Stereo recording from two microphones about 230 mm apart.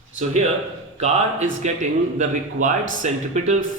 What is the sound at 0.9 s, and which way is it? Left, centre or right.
A man's voice, right.